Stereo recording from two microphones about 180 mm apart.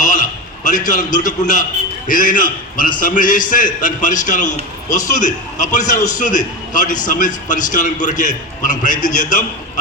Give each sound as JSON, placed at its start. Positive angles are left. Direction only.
{"t": 0.0, "sound": "a man's voice", "side_deg": 45}